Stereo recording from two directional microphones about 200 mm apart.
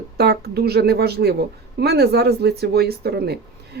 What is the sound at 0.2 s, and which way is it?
Speech, 55° right (ahead or behind).